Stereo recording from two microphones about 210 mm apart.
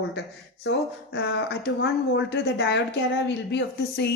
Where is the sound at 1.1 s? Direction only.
50° left (ahead or behind).